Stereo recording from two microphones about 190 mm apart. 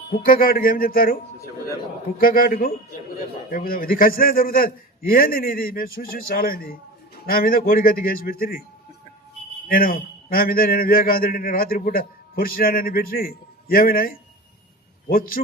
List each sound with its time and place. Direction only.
0.1 s a man's voice: 50° left (ahead or behind)
2.2 s a man's voice: 50° left (ahead or behind)
9.6 s a man's voice: 50° left (ahead or behind)